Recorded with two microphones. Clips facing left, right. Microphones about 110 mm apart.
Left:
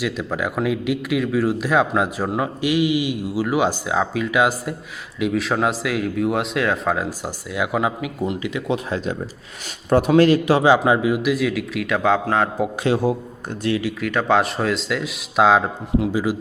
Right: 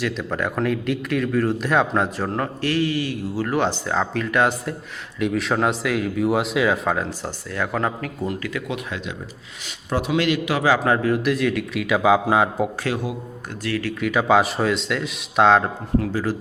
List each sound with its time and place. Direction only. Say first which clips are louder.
0.0 s a man's voice: left 1 dB; 5° left (ahead or behind); by 9.1 s 30° left (ahead or behind)
9.9 s a man's voice: left 7 dB; 45° left (ahead or behind)
10.6 s a man's voice: left 3 dB; 15° left (ahead or behind); by 12.5 s 10° right (ahead or behind)
12.8 s a man's voice: left 6 dB; 30° left (ahead or behind)
13.6 s a man's voice: left 4 dB; 20° left (ahead or behind)
14.0 s a man's voice: right 2 dB; 5° right (ahead or behind); by 16.4 s 10° left (ahead or behind)